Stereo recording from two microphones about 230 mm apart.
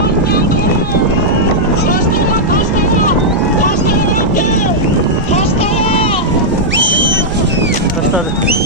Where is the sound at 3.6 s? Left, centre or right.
Left.